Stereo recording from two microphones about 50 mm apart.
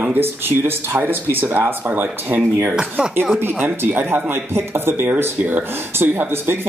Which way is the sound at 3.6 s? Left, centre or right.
Right.